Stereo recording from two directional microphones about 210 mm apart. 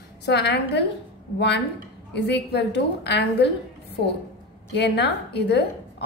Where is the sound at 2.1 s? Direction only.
55° left (ahead or behind).